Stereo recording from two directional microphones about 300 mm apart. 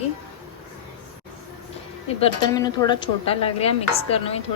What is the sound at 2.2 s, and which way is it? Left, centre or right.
Dishes, centre.